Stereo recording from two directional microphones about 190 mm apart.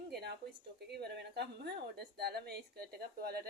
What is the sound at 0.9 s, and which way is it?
A woman's voice, 60° right (ahead or behind).